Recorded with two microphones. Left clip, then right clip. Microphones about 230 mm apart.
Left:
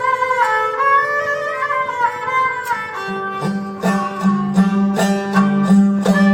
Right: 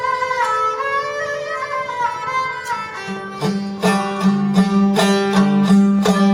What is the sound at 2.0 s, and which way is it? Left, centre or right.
Music, left.